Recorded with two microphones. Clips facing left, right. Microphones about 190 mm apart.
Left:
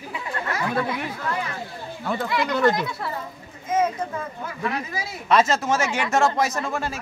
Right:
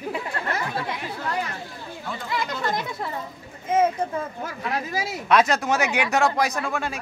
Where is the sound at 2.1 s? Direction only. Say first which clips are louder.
Left 6 dB; 65° left (ahead or behind).